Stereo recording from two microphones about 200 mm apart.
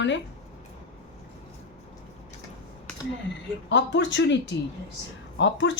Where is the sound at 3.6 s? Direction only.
65° left (ahead or behind).